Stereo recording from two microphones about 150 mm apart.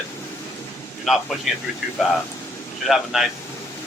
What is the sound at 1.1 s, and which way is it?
Speech, centre (ahead or behind).